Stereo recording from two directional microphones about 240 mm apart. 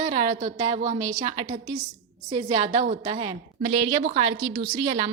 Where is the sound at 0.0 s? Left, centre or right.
Right.